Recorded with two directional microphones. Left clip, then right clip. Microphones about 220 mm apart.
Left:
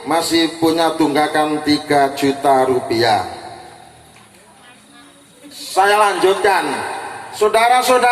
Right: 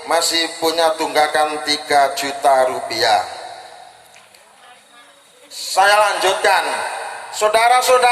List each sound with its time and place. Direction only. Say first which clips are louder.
0.0 s a man's voice: left 1 dB; 45° right (ahead or behind)
5.5 s a man's voice: even; 45° right (ahead or behind)